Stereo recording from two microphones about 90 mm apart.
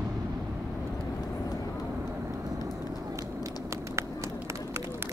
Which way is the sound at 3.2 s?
35° right (ahead or behind).